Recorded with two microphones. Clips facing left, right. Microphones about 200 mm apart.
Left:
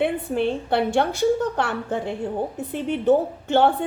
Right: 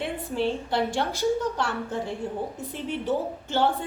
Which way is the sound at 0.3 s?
55° left (ahead or behind).